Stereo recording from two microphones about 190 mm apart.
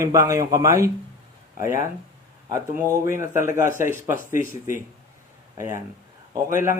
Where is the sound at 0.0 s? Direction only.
15° right (ahead or behind).